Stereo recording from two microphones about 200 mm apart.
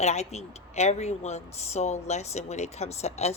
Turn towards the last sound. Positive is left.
turn(degrees=30)  # may be behind; listen again after turning